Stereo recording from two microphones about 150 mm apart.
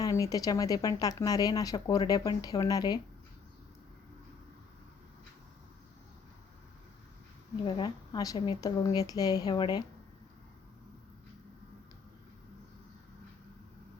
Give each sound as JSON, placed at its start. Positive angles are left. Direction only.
{"t": 0.0, "sound": "speech", "side_deg": 25}
{"t": 7.6, "sound": "speech", "side_deg": 30}